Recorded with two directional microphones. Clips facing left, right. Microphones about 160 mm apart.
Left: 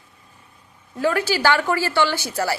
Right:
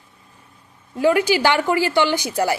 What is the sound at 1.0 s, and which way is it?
A woman's voice, 15° right (ahead or behind).